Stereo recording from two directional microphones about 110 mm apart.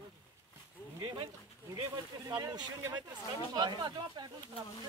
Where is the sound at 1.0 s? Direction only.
45° right (ahead or behind).